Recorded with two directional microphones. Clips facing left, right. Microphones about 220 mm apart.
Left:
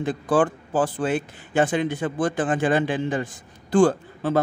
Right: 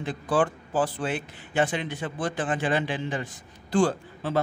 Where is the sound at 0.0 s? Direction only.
50° left (ahead or behind).